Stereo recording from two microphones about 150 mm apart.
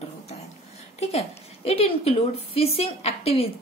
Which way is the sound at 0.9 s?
45° left (ahead or behind).